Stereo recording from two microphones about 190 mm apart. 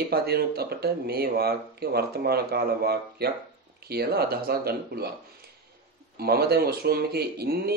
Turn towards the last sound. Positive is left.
turn(degrees=-55)  # may be behind; listen again after turning